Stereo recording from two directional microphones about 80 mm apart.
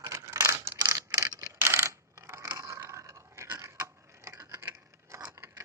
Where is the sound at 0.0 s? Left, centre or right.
Right.